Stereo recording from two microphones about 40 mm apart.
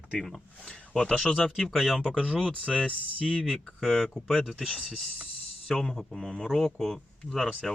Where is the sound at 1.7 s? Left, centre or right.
Centre.